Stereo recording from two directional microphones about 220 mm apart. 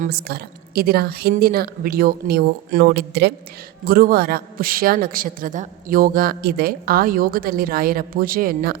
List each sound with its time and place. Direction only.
0.0 s a woman's voice: 45° right (ahead or behind)